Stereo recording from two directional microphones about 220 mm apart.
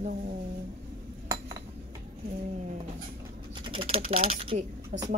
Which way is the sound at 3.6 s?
25° right (ahead or behind).